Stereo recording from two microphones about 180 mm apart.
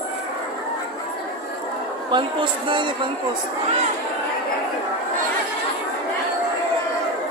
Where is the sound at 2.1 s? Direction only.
25° right (ahead or behind).